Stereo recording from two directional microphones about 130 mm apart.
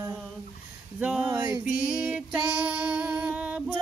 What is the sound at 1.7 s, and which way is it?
Female singing, 10° right (ahead or behind).